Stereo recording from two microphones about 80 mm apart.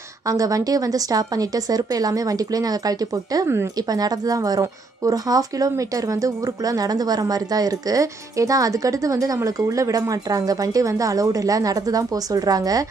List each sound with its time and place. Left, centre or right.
0.3 s a woman's voice: right